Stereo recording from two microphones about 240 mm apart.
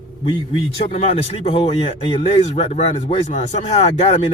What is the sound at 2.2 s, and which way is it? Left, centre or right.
Speech, left.